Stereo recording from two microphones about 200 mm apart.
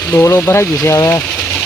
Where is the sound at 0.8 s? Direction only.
15° left (ahead or behind).